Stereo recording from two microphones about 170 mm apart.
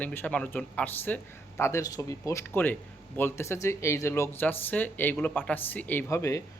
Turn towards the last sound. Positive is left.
turn(degrees=15)  # may be behind; listen again after turning